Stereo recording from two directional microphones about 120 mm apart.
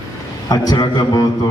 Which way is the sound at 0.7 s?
35° left (ahead or behind).